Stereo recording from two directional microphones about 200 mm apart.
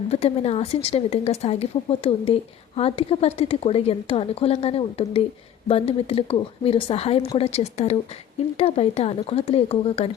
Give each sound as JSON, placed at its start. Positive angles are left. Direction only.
{"t": 0.1, "sound": "a woman's voice", "side_deg": 30}